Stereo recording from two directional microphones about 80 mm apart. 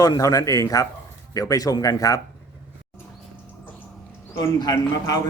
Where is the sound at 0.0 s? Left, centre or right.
Left.